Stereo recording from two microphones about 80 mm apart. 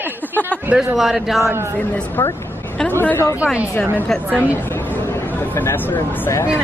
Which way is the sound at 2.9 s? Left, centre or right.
Left.